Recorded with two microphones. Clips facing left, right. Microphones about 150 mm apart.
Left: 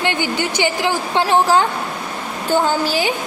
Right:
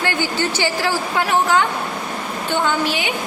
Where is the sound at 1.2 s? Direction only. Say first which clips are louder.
Left 3 dB; 30° left (ahead or behind).